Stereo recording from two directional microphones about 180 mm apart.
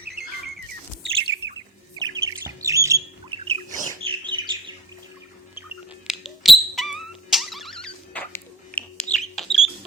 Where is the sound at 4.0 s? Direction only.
25° right (ahead or behind).